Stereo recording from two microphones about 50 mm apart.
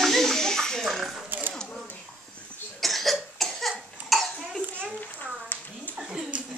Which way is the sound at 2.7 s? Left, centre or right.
Centre.